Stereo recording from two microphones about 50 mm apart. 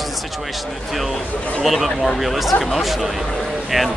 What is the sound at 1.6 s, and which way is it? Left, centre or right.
Speech, centre.